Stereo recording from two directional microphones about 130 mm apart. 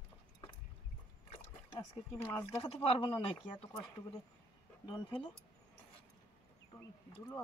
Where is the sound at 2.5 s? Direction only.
50° left (ahead or behind).